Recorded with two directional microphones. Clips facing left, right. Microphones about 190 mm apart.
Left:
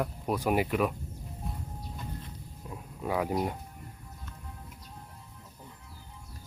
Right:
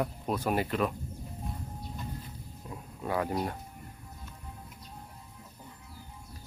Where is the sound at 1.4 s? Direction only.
Centre (ahead or behind).